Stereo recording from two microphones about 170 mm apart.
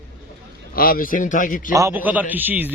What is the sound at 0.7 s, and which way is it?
Speech, 55° left (ahead or behind).